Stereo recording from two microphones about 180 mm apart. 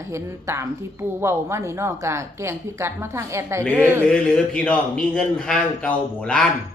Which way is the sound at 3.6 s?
5° left (ahead or behind).